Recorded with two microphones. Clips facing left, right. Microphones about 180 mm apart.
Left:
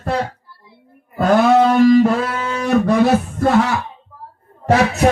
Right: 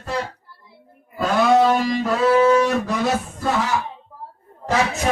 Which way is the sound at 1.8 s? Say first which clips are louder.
Left 11 dB; 50° left (ahead or behind).